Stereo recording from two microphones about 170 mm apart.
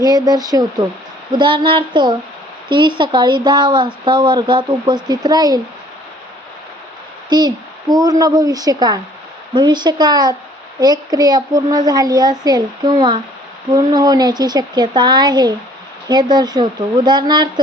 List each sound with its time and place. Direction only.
0.0 s a child's voice: 25° right (ahead or behind)
7.3 s a child's voice: 25° right (ahead or behind)